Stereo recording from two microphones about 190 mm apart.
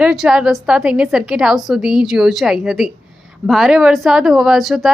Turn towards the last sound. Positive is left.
turn(degrees=0)  # may be behind; listen again after turning